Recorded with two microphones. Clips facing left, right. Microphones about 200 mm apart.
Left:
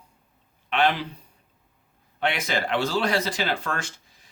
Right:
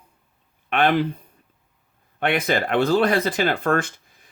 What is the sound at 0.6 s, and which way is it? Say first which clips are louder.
Speech: right 4 dB; 55° right (ahead or behind).